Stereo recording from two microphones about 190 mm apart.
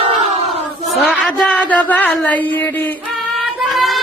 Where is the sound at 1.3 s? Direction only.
5° left (ahead or behind).